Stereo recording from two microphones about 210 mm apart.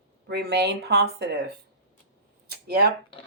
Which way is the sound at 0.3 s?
50° right (ahead or behind).